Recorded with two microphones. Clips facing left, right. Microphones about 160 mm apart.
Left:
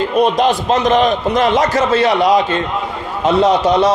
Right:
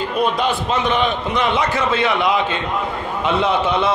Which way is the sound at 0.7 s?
40° left (ahead or behind).